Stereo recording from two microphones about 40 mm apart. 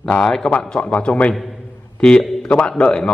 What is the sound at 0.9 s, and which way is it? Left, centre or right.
Speech, left.